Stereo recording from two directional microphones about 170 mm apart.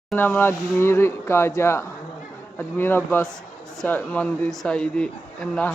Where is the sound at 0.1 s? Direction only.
10° left (ahead or behind).